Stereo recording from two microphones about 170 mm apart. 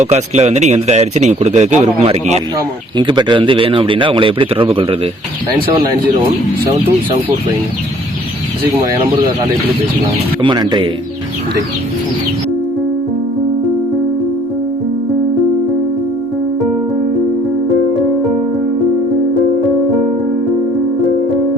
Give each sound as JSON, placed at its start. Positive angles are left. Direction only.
{"t": 0.0, "sound": "speech", "side_deg": -40}
{"t": 2.6, "sound": "speech", "side_deg": -25}
{"t": 10.4, "sound": "speech", "side_deg": -25}